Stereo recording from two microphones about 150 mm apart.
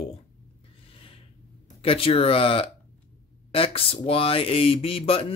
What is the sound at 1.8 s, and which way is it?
Speech, 40° left (ahead or behind).